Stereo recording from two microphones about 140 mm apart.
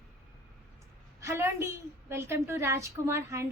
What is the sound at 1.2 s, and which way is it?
A woman's voice, 20° right (ahead or behind).